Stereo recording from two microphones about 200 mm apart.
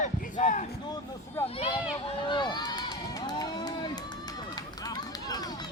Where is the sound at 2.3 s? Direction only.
20° left (ahead or behind).